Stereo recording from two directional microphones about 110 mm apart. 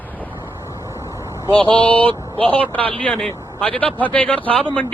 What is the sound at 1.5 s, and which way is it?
Speech, 50° right (ahead or behind).